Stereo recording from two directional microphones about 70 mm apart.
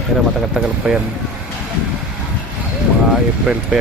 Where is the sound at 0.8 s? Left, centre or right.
Centre.